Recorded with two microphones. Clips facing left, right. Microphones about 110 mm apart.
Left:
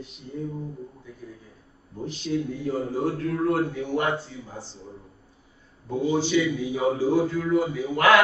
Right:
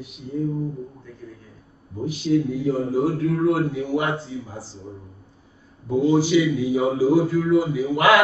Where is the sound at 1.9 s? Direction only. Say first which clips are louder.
Right 7 dB; 5° right (ahead or behind).